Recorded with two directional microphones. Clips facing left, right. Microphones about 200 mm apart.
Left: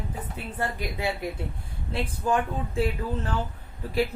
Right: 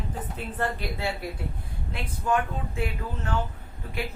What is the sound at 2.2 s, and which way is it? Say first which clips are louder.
Speech: even; 30° left (ahead or behind).